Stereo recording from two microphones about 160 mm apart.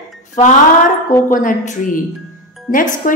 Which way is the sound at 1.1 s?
55° left (ahead or behind).